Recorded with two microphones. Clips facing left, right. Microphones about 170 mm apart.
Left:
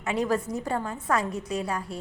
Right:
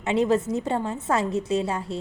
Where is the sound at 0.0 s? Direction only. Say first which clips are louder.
Right 5 dB; 25° right (ahead or behind).